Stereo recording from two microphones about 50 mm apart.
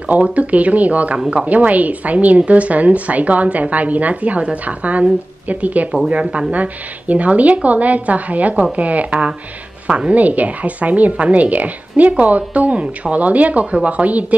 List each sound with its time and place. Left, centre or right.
0.0 s a woman's voice: right